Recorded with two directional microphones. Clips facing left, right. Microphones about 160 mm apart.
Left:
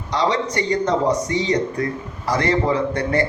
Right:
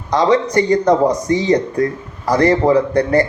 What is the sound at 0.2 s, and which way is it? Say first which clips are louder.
A man's voice: right 7 dB; 40° right (ahead or behind).